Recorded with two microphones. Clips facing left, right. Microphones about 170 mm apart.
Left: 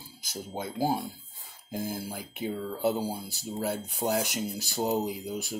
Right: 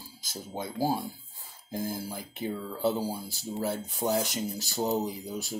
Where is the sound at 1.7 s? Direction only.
10° left (ahead or behind).